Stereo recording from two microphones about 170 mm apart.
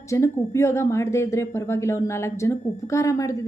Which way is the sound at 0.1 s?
15° left (ahead or behind).